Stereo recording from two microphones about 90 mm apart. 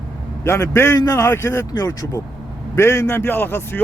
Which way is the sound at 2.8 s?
30° left (ahead or behind).